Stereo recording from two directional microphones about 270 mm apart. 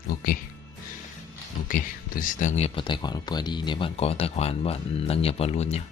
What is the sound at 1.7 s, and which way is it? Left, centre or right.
Speech, left.